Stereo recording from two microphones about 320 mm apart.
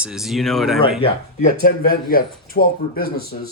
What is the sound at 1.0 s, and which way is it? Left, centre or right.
Speech, left.